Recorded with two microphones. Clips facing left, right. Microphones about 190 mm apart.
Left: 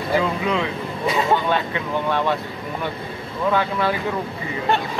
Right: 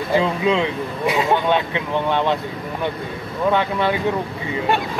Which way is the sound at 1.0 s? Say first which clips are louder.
Right 2 dB; 10° right (ahead or behind).